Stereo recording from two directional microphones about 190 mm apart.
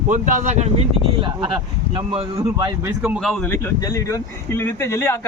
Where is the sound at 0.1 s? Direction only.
40° right (ahead or behind).